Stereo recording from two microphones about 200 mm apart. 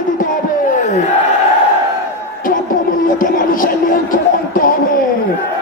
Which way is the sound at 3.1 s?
45° left (ahead or behind).